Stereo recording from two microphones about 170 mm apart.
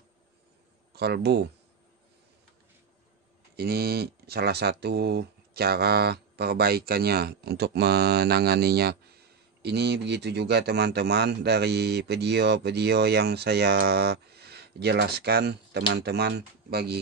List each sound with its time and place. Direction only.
0.9 s speech: 75° right (ahead or behind)
3.5 s speech: 65° right (ahead or behind)